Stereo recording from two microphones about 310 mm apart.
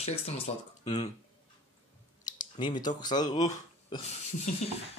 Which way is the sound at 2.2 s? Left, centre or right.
Centre.